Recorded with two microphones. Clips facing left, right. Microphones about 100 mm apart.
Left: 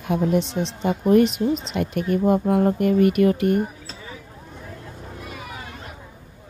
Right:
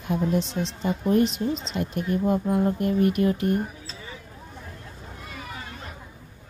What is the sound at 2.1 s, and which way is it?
A woman's voice, 65° left (ahead or behind).